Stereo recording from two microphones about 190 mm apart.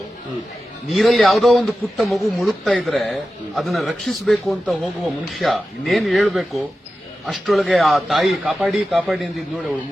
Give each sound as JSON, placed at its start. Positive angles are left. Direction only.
{"t": 0.9, "sound": "a man's voice", "side_deg": 0}